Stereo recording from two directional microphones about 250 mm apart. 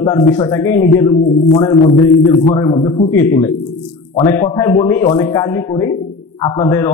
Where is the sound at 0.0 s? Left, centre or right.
Centre.